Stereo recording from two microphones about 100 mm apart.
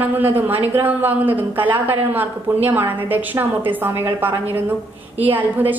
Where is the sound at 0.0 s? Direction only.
20° right (ahead or behind).